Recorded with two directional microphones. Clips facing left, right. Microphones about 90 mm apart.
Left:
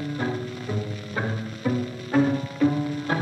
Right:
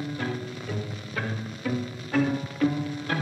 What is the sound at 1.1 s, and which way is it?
Music, 20° left (ahead or behind).